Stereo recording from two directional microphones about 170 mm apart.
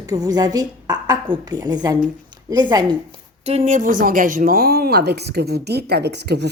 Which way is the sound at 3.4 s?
40° right (ahead or behind).